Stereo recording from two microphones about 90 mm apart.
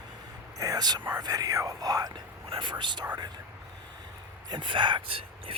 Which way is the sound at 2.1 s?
60° right (ahead or behind).